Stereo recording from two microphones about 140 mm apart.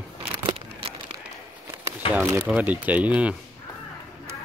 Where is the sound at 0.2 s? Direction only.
40° right (ahead or behind).